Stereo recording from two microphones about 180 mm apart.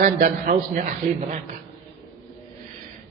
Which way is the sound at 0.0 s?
45° right (ahead or behind).